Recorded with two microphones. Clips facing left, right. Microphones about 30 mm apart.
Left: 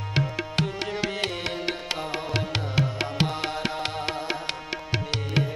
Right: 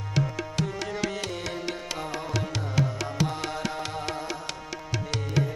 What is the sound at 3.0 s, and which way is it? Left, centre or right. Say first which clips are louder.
Music: left 2 dB; left.